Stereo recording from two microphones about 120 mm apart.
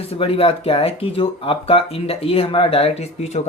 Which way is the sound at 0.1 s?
50° left (ahead or behind).